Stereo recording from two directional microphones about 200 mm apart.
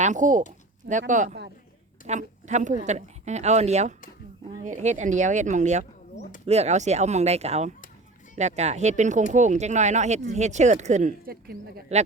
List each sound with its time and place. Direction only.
0.0 s speech: 40° right (ahead or behind)